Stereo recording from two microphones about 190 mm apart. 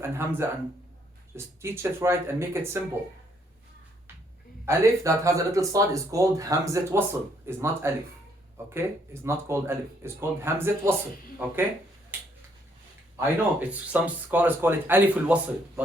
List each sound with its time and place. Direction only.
0.0 s speech: 10° right (ahead or behind)
1.6 s speech: 10° right (ahead or behind)
4.6 s speech: 15° right (ahead or behind)
9.2 s speech: 15° right (ahead or behind)
13.1 s speech: 10° right (ahead or behind)